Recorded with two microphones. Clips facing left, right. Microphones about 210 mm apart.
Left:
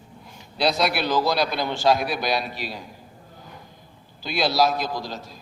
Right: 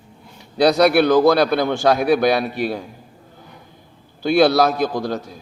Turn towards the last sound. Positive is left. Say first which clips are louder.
# right 8 dB
turn(degrees=-55)  # may be behind; listen again after turning